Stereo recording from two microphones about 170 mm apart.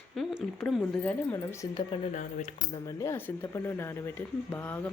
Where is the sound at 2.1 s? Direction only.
45° left (ahead or behind).